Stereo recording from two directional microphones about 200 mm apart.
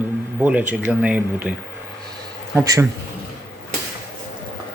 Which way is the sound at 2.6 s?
15° right (ahead or behind).